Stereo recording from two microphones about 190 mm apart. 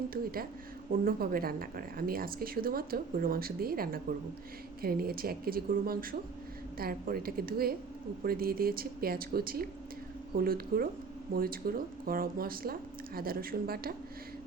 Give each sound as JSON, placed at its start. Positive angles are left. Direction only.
{"t": 0.1, "sound": "a woman's voice", "side_deg": -50}